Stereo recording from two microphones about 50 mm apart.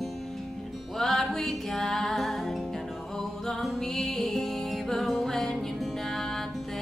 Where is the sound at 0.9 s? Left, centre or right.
Centre.